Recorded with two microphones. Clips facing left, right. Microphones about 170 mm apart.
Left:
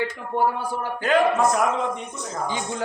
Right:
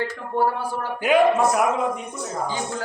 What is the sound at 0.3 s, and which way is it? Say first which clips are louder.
Speech: right 1 dB; 15° left (ahead or behind).